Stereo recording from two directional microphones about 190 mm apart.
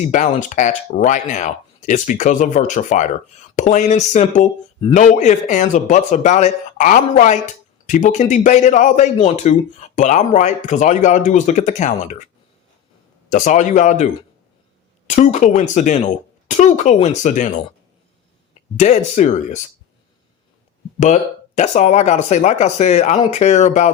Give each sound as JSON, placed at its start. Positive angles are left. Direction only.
{"t": 0.0, "sound": "a man's voice", "side_deg": 40}
{"t": 13.3, "sound": "a man's voice", "side_deg": 40}
{"t": 18.8, "sound": "a man's voice", "side_deg": 40}
{"t": 21.0, "sound": "a man's voice", "side_deg": 40}